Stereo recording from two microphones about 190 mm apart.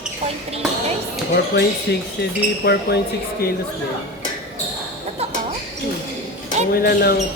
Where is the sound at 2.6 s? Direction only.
55° left (ahead or behind).